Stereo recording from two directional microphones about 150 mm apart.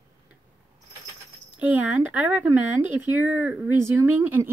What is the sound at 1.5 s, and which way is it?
Speech, 10° right (ahead or behind).